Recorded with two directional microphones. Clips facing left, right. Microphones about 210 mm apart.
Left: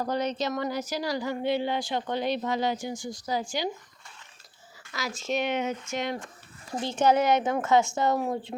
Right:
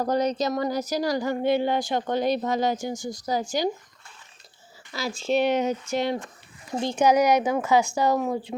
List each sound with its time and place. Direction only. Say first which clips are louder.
0.0 s speech: right 5 dB; 40° right (ahead or behind)
4.9 s speech: right 5 dB; 30° right (ahead or behind)
6.8 s speech: right 3 dB; 10° right (ahead or behind)
7.3 s speech: right 2 dB; centre (ahead or behind)